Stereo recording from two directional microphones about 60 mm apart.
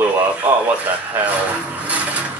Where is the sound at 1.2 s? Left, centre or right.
Right.